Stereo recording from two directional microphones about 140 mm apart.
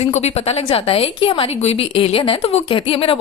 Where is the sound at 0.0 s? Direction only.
50° left (ahead or behind).